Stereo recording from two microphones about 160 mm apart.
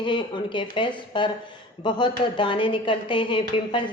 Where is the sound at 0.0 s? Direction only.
30° left (ahead or behind).